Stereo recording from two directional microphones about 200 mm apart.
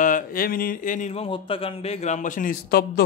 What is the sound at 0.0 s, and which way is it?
A man's voice, 45° left (ahead or behind).